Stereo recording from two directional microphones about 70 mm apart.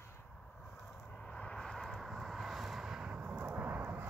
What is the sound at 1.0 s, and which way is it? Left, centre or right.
Vehicle, centre.